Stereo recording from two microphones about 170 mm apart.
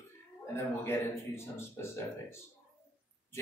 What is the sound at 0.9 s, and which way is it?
A man's voice, 15° left (ahead or behind).